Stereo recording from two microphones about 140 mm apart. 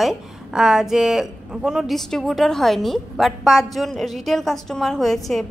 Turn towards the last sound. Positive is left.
turn(degrees=0)  # may be behind; listen again after turning